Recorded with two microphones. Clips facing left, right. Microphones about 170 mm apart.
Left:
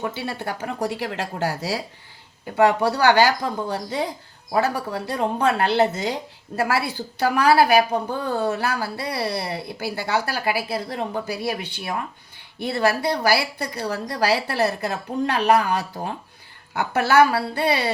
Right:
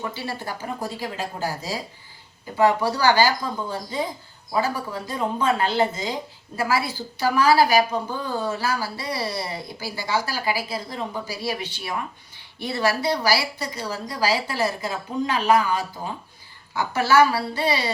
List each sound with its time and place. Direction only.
0.1 s speech: 60° left (ahead or behind)
2.6 s a woman's voice: 65° left (ahead or behind)